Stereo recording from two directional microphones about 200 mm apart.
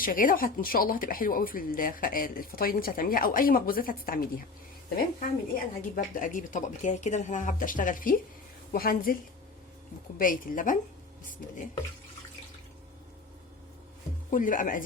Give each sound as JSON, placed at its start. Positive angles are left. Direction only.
{"t": 0.0, "sound": "a woman's voice", "side_deg": 45}
{"t": 10.2, "sound": "a woman's voice", "side_deg": 45}
{"t": 14.3, "sound": "speech", "side_deg": 40}